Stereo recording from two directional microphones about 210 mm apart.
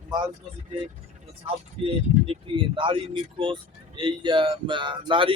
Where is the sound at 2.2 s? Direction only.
25° right (ahead or behind).